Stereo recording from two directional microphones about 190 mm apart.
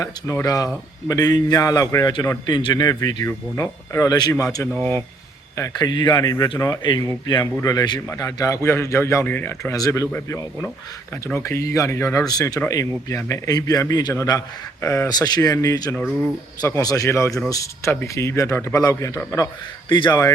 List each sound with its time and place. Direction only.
0.0 s speech: 15° left (ahead or behind)
4.7 s speech: 10° left (ahead or behind)